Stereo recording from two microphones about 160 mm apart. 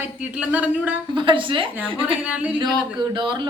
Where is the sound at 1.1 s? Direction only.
30° right (ahead or behind).